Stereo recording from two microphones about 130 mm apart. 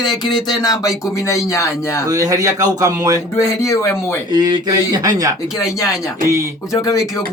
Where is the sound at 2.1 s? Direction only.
30° right (ahead or behind).